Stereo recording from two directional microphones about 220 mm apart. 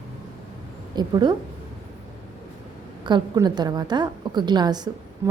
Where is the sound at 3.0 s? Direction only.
20° right (ahead or behind).